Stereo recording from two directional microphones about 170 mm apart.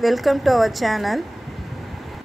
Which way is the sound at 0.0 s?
Centre (ahead or behind).